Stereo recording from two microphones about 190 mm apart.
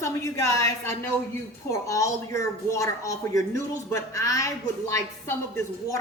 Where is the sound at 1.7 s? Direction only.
15° left (ahead or behind).